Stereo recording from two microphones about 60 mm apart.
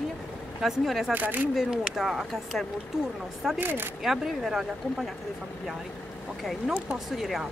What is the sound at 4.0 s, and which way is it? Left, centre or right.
Speech, centre.